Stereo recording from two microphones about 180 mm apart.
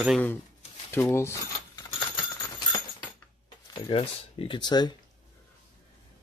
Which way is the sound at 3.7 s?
25° left (ahead or behind).